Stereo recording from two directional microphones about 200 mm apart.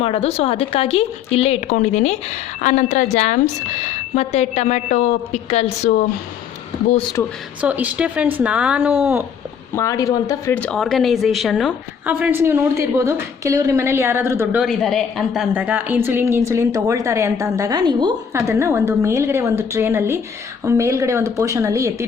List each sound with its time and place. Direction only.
0.0 s speech: 30° left (ahead or behind)
7.2 s speech: 10° left (ahead or behind)
7.6 s speech: 5° right (ahead or behind)
9.7 s speech: 15° left (ahead or behind); by 22.0 s 15° right (ahead or behind)